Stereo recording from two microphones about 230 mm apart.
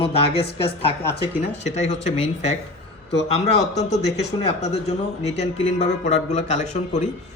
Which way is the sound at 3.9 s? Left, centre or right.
Left.